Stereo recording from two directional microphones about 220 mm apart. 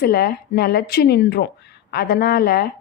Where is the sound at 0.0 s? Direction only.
45° left (ahead or behind).